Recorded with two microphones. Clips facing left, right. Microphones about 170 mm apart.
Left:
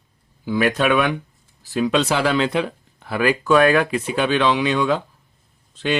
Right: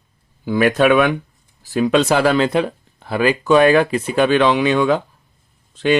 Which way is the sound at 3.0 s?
25° right (ahead or behind).